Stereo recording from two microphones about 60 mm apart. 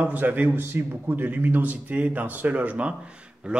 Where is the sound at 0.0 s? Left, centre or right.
Right.